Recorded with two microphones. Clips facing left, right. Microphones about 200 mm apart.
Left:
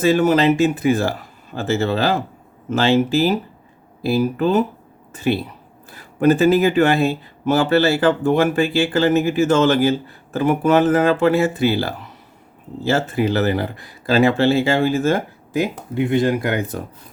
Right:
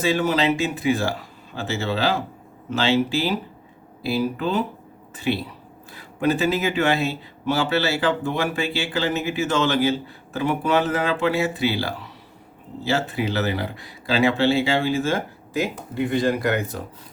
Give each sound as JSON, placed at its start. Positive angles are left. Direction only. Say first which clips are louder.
{"t": 0.0, "sound": "speech", "louder": "left 6 dB", "side_deg": 50}